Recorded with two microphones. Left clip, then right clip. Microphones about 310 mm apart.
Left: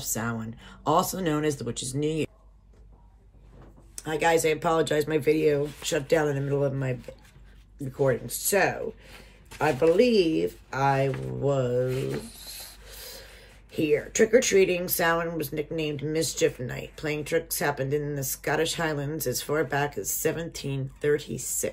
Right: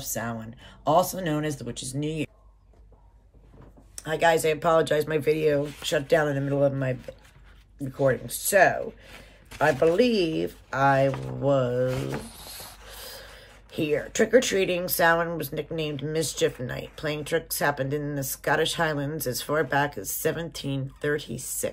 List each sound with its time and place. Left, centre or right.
0.0 s speech: centre
3.9 s speech: centre
11.9 s speech: right
12.3 s speech: centre